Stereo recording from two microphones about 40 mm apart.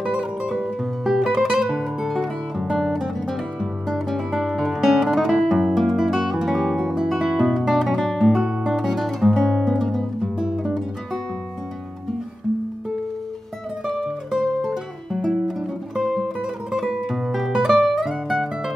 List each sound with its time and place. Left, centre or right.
0.0 s music: right
7.5 s guitar: centre
10.2 s music: centre
14.7 s music: centre